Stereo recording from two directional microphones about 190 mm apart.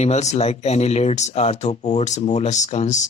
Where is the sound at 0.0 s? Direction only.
35° left (ahead or behind).